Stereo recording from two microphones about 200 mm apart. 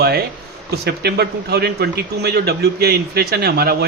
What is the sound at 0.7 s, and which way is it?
A man's voice, 55° right (ahead or behind).